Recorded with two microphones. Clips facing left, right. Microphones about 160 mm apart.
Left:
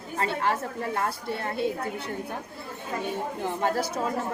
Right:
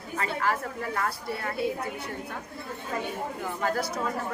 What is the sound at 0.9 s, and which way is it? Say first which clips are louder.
Speech: left 1 dB; 25° left (ahead or behind).